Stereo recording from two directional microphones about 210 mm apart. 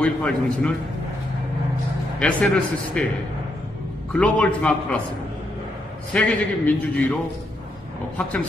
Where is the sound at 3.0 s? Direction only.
5° left (ahead or behind).